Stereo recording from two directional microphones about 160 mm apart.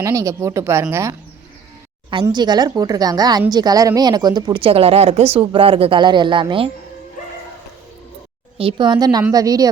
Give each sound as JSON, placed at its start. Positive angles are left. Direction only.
{"t": 0.0, "sound": "speech", "side_deg": -20}
{"t": 2.2, "sound": "a woman's voice", "side_deg": -25}
{"t": 8.5, "sound": "a woman's voice", "side_deg": -30}